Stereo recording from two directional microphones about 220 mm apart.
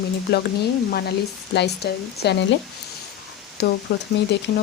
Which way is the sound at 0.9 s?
45° left (ahead or behind).